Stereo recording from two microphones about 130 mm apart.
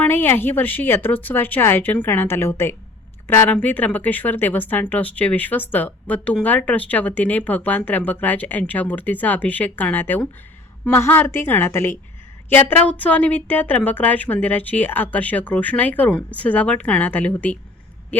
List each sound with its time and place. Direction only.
0.0 s speech: 15° left (ahead or behind)